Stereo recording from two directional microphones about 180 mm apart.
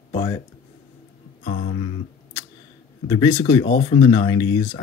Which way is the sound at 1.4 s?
50° left (ahead or behind).